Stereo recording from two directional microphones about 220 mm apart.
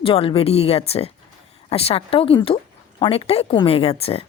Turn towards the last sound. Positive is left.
turn(degrees=25)  # may be behind; listen again after turning